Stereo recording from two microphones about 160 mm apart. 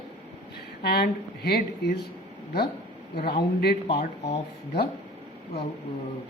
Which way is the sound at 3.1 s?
80° left.